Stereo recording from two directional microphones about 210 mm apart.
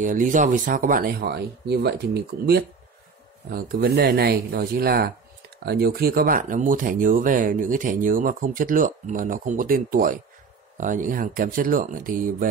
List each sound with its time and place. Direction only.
0.0 s speech: 40° right (ahead or behind)